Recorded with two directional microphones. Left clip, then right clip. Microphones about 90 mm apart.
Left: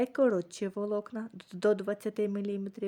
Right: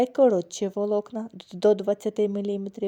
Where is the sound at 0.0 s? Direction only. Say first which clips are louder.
Right 8 dB; 25° right (ahead or behind).